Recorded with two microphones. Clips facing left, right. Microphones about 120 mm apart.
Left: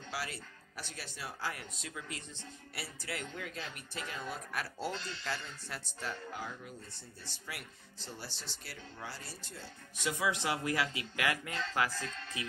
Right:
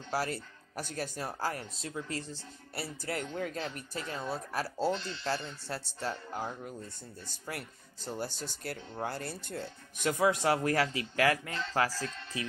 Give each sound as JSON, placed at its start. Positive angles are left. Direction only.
{"t": 0.1, "sound": "speech", "side_deg": -45}